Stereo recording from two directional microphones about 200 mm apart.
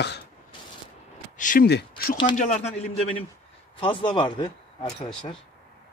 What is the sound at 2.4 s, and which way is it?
A man's voice, 35° left (ahead or behind).